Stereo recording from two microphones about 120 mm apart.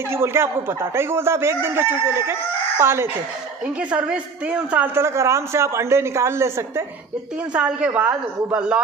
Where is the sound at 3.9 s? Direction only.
10° right (ahead or behind).